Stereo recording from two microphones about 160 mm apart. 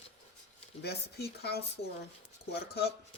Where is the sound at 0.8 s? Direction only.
90° left.